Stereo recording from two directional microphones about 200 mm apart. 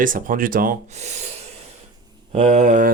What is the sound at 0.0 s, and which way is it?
Speech, 45° right (ahead or behind).